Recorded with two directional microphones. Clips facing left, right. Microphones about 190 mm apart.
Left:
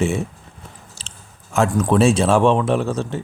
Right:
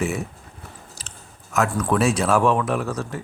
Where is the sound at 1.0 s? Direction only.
30° left (ahead or behind).